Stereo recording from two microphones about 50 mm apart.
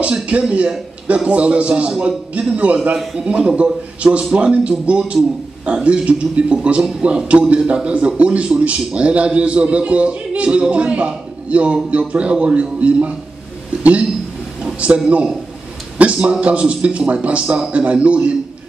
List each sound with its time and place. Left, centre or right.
0.0 s a man's voice: right
14.8 s a man's voice: right